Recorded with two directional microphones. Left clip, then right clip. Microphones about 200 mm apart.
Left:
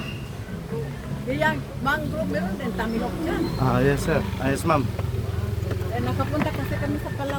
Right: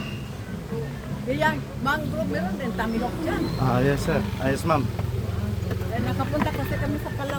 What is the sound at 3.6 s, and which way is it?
Speech, 15° left (ahead or behind).